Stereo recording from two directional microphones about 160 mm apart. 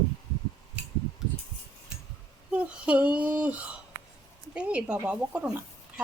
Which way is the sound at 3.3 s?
10° right (ahead or behind).